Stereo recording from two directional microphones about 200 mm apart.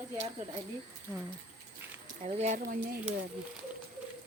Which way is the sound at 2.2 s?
35° right (ahead or behind).